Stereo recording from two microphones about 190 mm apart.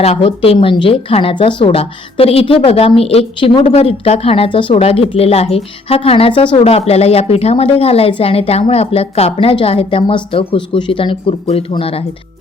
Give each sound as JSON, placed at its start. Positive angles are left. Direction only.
{"t": 0.0, "sound": "a woman's voice", "side_deg": 30}